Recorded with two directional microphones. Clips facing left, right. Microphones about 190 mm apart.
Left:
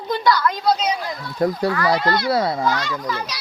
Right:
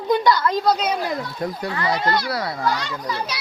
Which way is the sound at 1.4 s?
35° left (ahead or behind).